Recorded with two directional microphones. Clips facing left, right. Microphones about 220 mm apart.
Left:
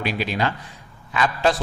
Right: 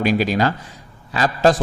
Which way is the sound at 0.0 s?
40° right (ahead or behind).